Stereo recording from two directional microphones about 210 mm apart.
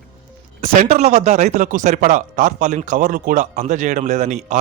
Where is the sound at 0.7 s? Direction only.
35° right (ahead or behind).